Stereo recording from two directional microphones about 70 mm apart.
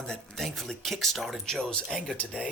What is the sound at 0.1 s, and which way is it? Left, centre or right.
Speech, centre.